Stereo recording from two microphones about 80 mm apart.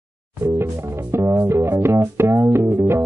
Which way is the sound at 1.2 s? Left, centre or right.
Right.